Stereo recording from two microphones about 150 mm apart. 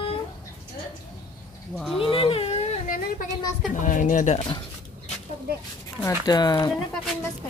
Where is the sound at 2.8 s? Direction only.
65° left (ahead or behind).